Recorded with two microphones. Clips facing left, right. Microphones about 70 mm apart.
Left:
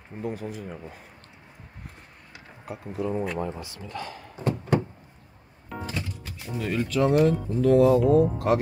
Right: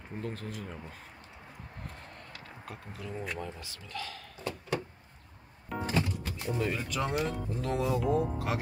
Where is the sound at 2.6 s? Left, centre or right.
Left.